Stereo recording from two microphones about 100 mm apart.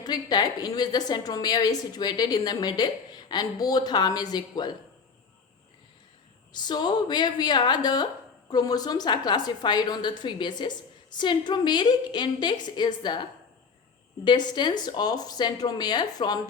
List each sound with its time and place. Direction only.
0.0 s a woman's voice: 40° left (ahead or behind)
6.5 s a woman's voice: 45° left (ahead or behind)
14.3 s a woman's voice: 50° left (ahead or behind)